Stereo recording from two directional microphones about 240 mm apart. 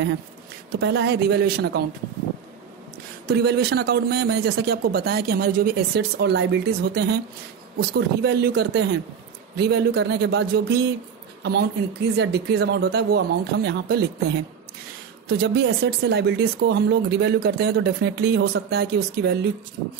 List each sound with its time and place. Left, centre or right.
0.7 s speech: right
3.3 s speech: right
8.2 s speech: right
15.2 s speech: right